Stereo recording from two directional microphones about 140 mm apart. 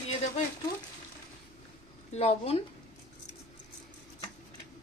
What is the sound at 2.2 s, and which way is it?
Speech, 45° left (ahead or behind).